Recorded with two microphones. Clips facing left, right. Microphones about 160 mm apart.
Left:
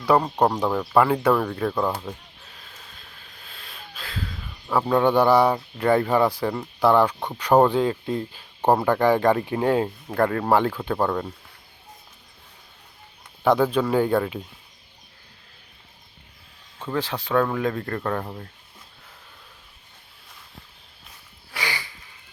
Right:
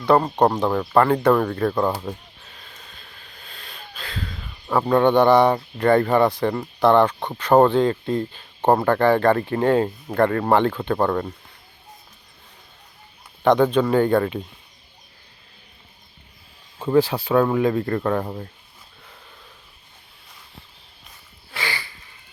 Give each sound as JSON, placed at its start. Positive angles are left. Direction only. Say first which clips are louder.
{"t": 0.1, "sound": "speech", "louder": "right 2 dB", "side_deg": 5}
{"t": 1.8, "sound": "a sound", "louder": "right 3 dB", "side_deg": 0}
{"t": 5.5, "sound": "speech", "louder": "right 3 dB", "side_deg": 5}
{"t": 13.4, "sound": "speech", "louder": "right 3 dB", "side_deg": 5}
{"t": 16.7, "sound": "speech", "louder": "right 9 dB", "side_deg": -10}
{"t": 21.5, "sound": "a sound", "louder": "right 1 dB", "side_deg": 15}